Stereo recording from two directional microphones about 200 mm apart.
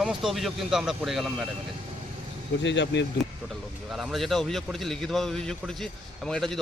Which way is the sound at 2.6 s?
65° left (ahead or behind).